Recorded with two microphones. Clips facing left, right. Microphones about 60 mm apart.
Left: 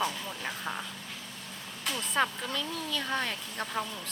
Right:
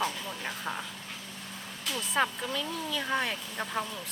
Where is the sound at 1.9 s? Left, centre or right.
Centre.